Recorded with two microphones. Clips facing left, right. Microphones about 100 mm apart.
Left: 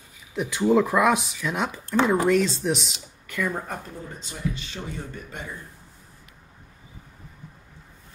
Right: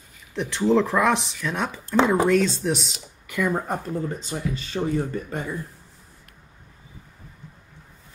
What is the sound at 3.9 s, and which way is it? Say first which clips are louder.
Speech: right 10 dB; 40° right (ahead or behind).